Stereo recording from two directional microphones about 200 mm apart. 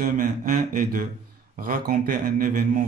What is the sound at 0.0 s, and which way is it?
Speech, 40° right (ahead or behind).